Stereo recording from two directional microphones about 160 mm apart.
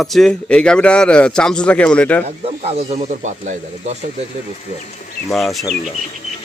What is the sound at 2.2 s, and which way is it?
Speech, 40° right (ahead or behind).